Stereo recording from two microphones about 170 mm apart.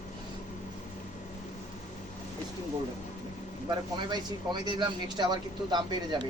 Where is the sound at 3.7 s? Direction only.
25° right (ahead or behind).